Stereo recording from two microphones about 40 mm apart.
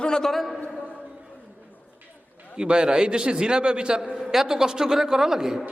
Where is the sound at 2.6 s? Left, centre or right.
Right.